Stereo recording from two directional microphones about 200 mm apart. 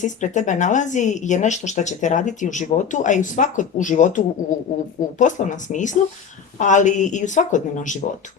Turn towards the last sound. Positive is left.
turn(degrees=40)  # may be behind; listen again after turning